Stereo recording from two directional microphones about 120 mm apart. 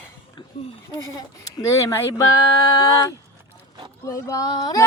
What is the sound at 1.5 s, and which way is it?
Speech, 25° left (ahead or behind).